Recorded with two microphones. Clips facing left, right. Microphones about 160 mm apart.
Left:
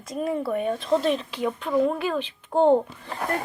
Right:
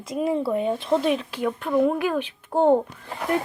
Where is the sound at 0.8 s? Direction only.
5° right (ahead or behind).